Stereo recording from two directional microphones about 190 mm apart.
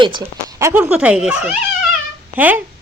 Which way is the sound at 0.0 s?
20° right (ahead or behind).